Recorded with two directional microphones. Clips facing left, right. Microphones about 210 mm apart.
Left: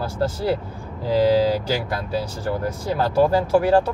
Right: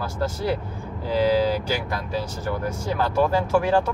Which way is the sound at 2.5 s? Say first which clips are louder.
Left 3 dB; 35° left (ahead or behind).